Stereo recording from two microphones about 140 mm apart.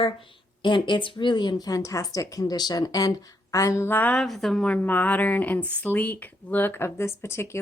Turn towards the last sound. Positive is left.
turn(degrees=20)  # may be behind; listen again after turning